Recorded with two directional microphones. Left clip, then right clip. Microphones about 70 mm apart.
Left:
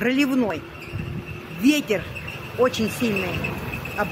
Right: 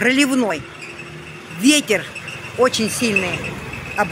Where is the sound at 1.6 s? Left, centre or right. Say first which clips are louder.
Right 5 dB; right.